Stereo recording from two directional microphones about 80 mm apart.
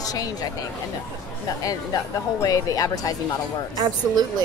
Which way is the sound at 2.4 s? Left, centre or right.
Left.